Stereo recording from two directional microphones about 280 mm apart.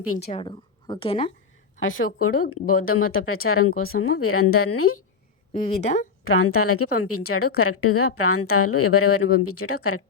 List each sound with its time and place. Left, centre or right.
0.3 s a woman's voice: centre
1.8 s a woman's voice: left
5.5 s speech: left
6.2 s a woman's voice: left